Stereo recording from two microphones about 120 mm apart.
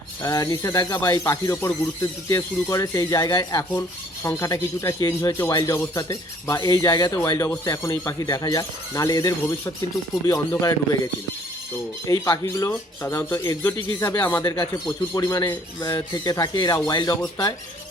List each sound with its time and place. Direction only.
0.2 s speech: 30° left (ahead or behind)
13.7 s speech: 30° left (ahead or behind)